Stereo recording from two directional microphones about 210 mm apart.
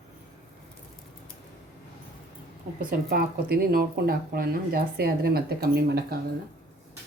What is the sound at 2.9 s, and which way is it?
Speech, 45° right (ahead or behind).